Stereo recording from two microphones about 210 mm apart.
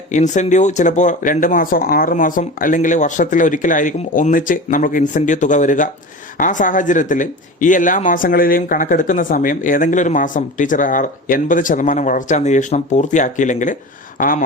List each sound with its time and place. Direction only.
0.1 s speech: 35° left (ahead or behind)